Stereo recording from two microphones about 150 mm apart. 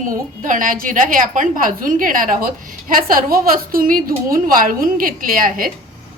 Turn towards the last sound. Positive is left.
turn(degrees=-70)  # may be behind; listen again after turning